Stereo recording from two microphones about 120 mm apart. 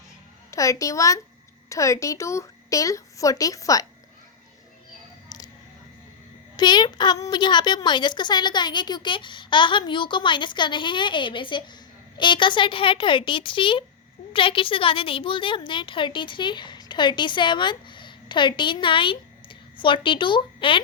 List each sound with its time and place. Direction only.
0.5 s speech: 25° left (ahead or behind)
6.6 s a woman's voice: 35° left (ahead or behind)